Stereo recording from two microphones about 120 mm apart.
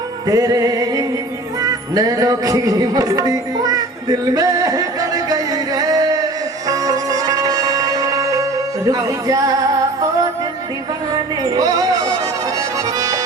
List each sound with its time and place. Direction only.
0.3 s music: 30° right (ahead or behind)
1.6 s speech: 30° right (ahead or behind)
6.7 s music: 30° right (ahead or behind)
11.1 s speech: 30° right (ahead or behind)
12.5 s accordion: 25° right (ahead or behind)